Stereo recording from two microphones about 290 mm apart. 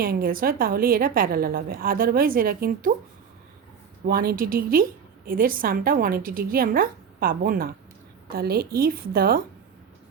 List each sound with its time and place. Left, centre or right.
0.0 s a woman's voice: right
4.0 s a woman's voice: right